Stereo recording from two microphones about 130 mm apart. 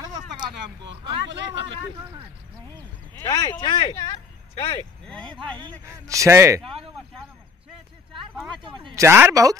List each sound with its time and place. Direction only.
1.0 s speech: 35° right (ahead or behind)
3.2 s speech: 30° left (ahead or behind)
4.0 s a sound: 30° left (ahead or behind)
5.0 s speech: 10° left (ahead or behind)
5.9 s a man's voice: 25° right (ahead or behind)
8.9 s a man's voice: 20° right (ahead or behind)